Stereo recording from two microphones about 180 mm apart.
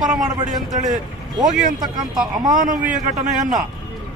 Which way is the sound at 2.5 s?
50° right (ahead or behind).